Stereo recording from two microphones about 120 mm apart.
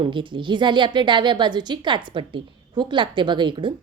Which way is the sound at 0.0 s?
45° right (ahead or behind).